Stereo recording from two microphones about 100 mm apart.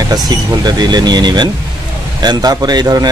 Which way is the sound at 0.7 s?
45° right (ahead or behind).